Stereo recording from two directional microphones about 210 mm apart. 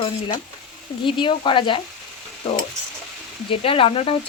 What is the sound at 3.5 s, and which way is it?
Stir, 25° left (ahead or behind).